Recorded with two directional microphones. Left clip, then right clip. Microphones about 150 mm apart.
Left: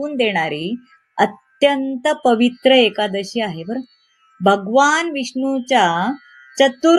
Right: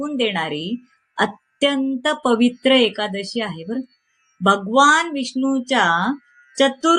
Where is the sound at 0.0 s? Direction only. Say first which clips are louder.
Left 3 dB; 10° left (ahead or behind).